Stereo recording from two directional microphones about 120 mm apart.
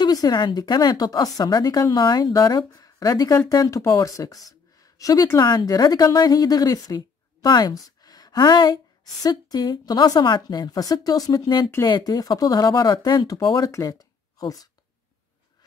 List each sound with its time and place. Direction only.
0.0 s a woman's voice: 35° left (ahead or behind)